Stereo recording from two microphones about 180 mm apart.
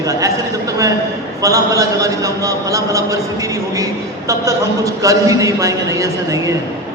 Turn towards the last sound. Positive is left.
turn(degrees=-20)  # may be behind; listen again after turning